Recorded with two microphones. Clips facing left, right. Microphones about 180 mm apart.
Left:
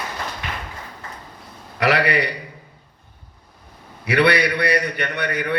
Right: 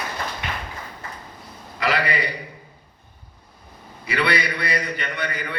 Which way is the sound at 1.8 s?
70° left (ahead or behind).